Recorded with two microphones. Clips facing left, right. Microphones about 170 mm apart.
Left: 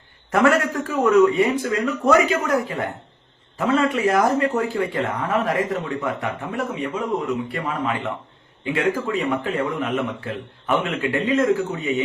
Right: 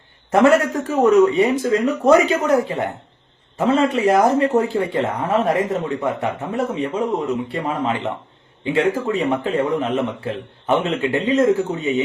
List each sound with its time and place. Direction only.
0.3 s a man's voice: 25° right (ahead or behind)